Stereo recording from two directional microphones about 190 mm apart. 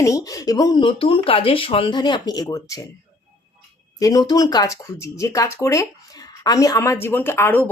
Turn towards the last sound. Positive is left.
turn(degrees=10)  # may be behind; listen again after turning